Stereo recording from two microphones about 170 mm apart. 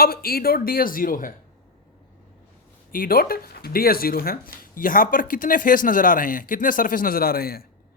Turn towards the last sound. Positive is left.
turn(degrees=60)  # may be behind; listen again after turning